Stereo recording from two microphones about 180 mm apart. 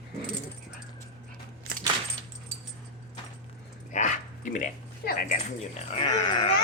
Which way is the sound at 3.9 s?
45° left (ahead or behind).